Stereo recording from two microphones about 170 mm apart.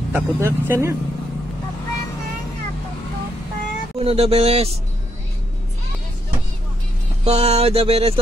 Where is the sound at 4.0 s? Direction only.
35° right (ahead or behind).